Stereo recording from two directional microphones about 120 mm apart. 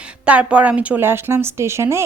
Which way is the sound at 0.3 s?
10° right (ahead or behind).